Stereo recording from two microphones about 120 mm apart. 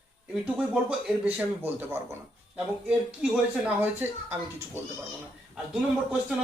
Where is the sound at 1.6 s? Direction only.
20° right (ahead or behind).